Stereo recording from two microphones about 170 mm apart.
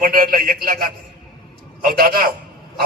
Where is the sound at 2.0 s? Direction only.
60° right (ahead or behind).